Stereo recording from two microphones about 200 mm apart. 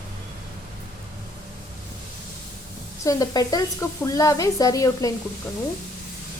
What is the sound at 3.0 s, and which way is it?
Speech, 15° left (ahead or behind).